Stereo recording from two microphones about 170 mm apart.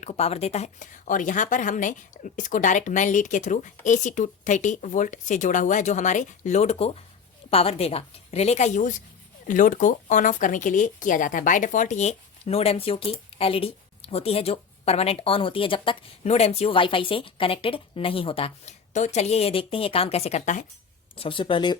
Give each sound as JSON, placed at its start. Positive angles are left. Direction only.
{"t": 0.0, "sound": "a woman's voice", "side_deg": 40}
{"t": 21.2, "sound": "speech", "side_deg": 30}